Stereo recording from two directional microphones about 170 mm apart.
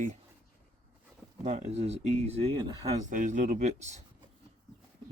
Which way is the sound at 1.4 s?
40° right (ahead or behind).